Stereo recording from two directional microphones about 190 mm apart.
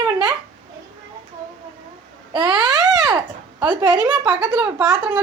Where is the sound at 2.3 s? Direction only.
20° right (ahead or behind).